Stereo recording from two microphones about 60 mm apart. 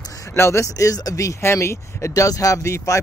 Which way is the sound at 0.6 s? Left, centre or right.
Left.